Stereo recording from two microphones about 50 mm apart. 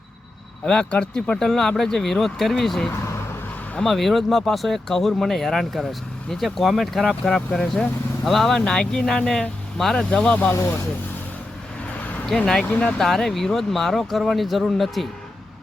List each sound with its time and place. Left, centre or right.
0.6 s speech: centre
10.1 s speech: left
11.9 s vehicle: left
13.0 s speech: centre